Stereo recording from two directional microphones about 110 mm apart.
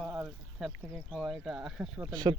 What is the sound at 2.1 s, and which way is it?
Speech, 40° right (ahead or behind).